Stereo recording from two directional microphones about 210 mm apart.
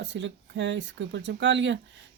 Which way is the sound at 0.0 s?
55° right (ahead or behind).